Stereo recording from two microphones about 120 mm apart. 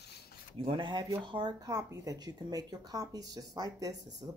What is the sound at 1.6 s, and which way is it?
Speech, 30° right (ahead or behind).